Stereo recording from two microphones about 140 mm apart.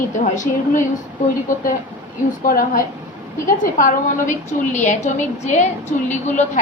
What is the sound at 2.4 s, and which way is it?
Speech, 90° left.